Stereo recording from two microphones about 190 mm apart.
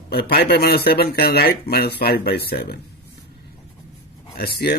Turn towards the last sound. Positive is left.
turn(degrees=55)  # may be behind; listen again after turning